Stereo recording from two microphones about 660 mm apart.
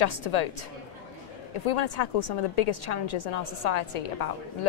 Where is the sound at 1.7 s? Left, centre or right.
Left.